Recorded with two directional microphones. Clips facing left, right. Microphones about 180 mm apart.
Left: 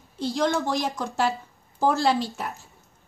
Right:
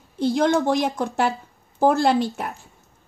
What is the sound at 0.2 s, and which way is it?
Speech, 55° right (ahead or behind).